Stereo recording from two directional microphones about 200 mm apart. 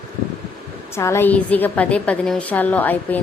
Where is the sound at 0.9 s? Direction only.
15° left (ahead or behind).